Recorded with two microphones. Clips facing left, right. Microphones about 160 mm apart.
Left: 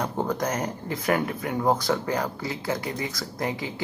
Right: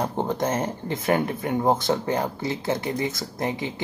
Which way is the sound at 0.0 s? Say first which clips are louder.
Right 2 dB; 25° right (ahead or behind).